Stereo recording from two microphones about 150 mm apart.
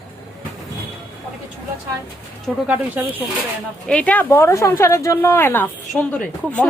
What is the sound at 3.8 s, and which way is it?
Speech, 10° left (ahead or behind).